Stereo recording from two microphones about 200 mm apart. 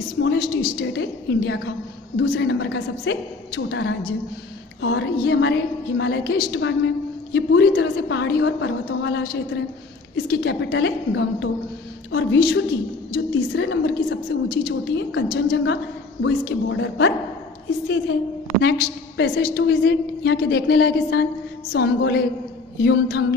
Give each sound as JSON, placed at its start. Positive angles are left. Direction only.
{"t": 0.2, "sound": "a woman's voice", "side_deg": 55}
{"t": 10.4, "sound": "a woman's voice", "side_deg": 65}
{"t": 18.6, "sound": "a woman's voice", "side_deg": 60}